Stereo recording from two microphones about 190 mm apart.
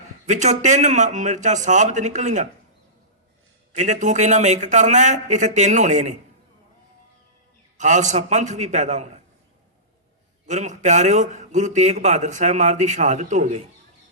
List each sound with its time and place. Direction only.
0.3 s a man's voice: 40° right (ahead or behind)
3.7 s a man's voice: 40° right (ahead or behind)
7.8 s a man's voice: 40° right (ahead or behind)
10.4 s a man's voice: 40° right (ahead or behind)